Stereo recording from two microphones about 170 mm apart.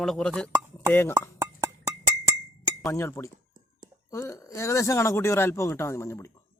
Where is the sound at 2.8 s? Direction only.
15° left (ahead or behind).